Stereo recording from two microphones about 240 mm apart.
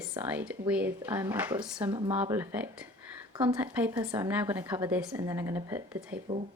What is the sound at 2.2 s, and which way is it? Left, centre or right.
Speech, centre.